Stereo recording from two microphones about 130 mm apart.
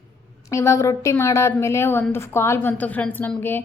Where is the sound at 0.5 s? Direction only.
20° left (ahead or behind).